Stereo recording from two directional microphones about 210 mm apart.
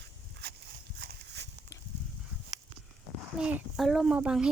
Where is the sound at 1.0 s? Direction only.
50° right (ahead or behind).